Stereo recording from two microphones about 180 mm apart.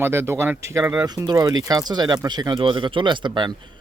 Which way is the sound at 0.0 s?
15° right (ahead or behind).